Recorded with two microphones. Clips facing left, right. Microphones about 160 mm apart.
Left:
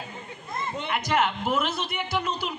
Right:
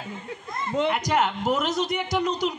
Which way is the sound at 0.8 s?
40° right (ahead or behind).